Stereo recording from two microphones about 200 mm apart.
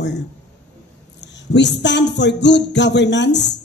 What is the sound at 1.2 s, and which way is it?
Speech, 60° left (ahead or behind).